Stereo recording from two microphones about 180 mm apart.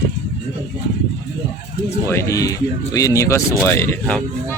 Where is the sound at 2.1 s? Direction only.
15° left (ahead or behind).